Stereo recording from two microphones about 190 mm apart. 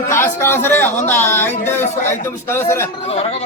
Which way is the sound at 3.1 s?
30° left (ahead or behind).